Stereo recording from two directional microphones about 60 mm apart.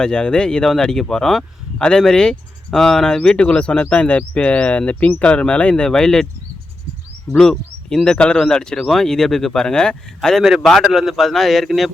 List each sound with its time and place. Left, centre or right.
0.0 s speech: centre
7.3 s speech: centre
10.2 s a man's voice: centre
10.9 s a man's voice: centre